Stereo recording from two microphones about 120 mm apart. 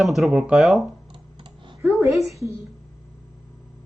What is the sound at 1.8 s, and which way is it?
Speech, 25° right (ahead or behind).